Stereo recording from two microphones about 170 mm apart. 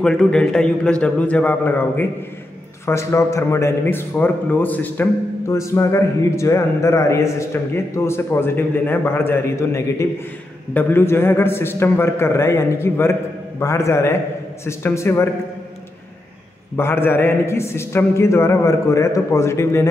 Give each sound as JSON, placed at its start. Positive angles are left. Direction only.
{"t": 0.0, "sound": "a man's voice", "side_deg": 5}
{"t": 16.7, "sound": "a man's voice", "side_deg": 15}